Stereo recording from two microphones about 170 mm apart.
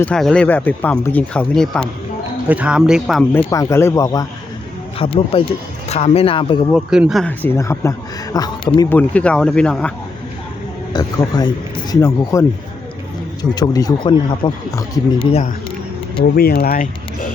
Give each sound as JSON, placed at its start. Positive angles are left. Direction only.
{"t": 0.0, "sound": "speech", "side_deg": 5}
{"t": 2.5, "sound": "speech", "side_deg": -5}
{"t": 3.3, "sound": "speech", "side_deg": 20}
{"t": 4.9, "sound": "speech", "side_deg": 35}
{"t": 6.7, "sound": "speech", "side_deg": 0}
{"t": 7.3, "sound": "speech", "side_deg": 15}
{"t": 8.9, "sound": "speech", "side_deg": 10}
{"t": 10.9, "sound": "speech", "side_deg": 25}
{"t": 15.2, "sound": "speech", "side_deg": 40}
{"t": 16.3, "sound": "speech", "side_deg": 65}